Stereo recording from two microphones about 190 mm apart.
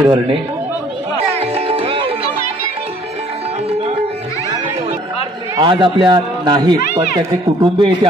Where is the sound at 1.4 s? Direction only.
30° right (ahead or behind).